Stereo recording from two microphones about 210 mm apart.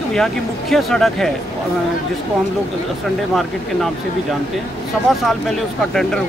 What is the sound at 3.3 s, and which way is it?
Speech, centre (ahead or behind).